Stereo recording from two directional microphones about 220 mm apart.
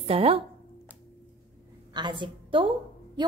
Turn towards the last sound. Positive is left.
turn(degrees=-25)  # may be behind; listen again after turning